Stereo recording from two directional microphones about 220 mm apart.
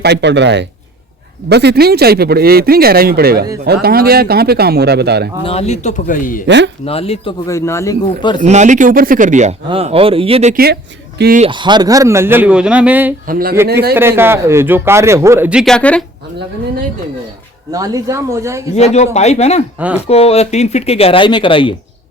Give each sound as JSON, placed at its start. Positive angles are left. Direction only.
{"t": 0.0, "sound": "speech", "side_deg": -50}
{"t": 5.5, "sound": "speech", "side_deg": 30}
{"t": 6.8, "sound": "speech", "side_deg": 25}
{"t": 7.4, "sound": "speech", "side_deg": 15}
{"t": 8.4, "sound": "speech", "side_deg": -35}
{"t": 10.5, "sound": "speech", "side_deg": -45}
{"t": 11.4, "sound": "speech", "side_deg": -20}
{"t": 13.2, "sound": "speech", "side_deg": -40}
{"t": 13.9, "sound": "speech", "side_deg": -10}
{"t": 17.7, "sound": "speech", "side_deg": -15}
{"t": 18.7, "sound": "speech", "side_deg": 30}